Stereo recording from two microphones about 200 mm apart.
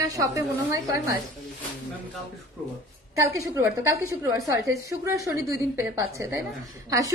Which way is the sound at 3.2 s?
15° right (ahead or behind).